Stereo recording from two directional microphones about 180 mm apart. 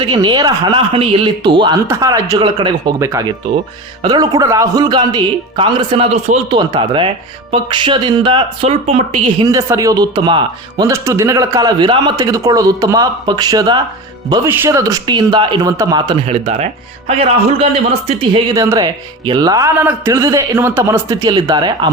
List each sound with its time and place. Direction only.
0.0 s a man's voice: 25° right (ahead or behind)
9.5 s a man's voice: 20° right (ahead or behind)
14.4 s a man's voice: 10° right (ahead or behind)
16.2 s a man's voice: 35° right (ahead or behind)
18.5 s a man's voice: 15° right (ahead or behind)